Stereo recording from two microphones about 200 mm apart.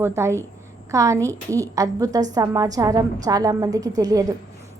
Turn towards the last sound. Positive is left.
turn(degrees=-20)  # may be behind; listen again after turning